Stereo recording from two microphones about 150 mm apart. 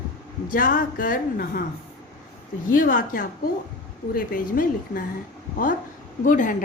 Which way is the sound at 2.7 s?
65° left (ahead or behind).